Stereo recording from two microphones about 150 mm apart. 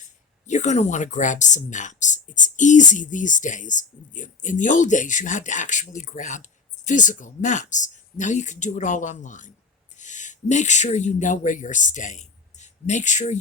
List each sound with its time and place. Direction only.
0.4 s speech: 50° left (ahead or behind)